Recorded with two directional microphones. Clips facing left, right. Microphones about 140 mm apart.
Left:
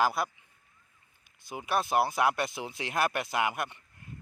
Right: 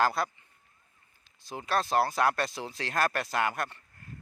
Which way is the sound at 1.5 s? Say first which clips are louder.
Even; 10° left (ahead or behind).